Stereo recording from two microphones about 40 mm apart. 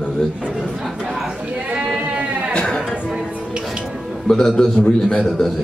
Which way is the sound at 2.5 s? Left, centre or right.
Centre.